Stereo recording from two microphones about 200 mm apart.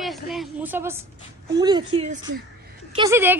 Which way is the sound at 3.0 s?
15° right (ahead or behind).